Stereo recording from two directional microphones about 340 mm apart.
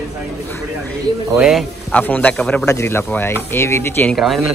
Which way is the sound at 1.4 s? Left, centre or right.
Centre.